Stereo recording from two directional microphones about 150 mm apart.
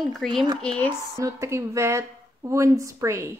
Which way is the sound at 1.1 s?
20° right (ahead or behind).